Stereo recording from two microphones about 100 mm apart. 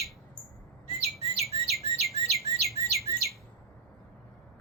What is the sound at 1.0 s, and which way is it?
Chirp, 90° right.